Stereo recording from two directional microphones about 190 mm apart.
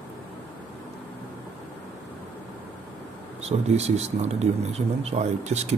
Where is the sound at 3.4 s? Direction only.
35° right (ahead or behind).